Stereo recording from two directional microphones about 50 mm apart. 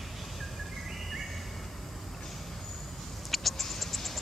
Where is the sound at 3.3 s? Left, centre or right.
Centre.